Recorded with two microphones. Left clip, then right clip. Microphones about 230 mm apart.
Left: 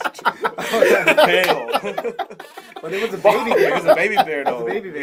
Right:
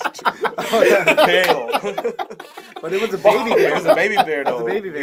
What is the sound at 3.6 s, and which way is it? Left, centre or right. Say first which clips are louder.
Speech: even; centre.